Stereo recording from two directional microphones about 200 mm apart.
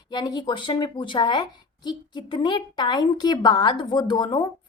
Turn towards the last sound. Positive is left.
turn(degrees=20)  # may be behind; listen again after turning